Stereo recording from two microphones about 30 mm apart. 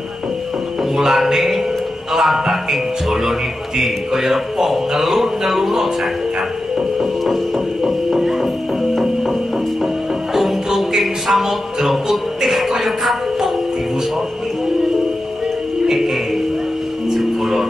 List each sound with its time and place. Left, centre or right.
0.9 s speech: centre
7.0 s music: centre
10.3 s music: centre